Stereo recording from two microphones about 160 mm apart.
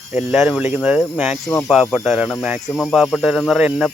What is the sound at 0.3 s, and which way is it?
Speech, 15° right (ahead or behind).